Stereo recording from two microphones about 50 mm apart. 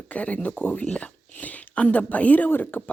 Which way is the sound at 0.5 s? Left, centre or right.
Left.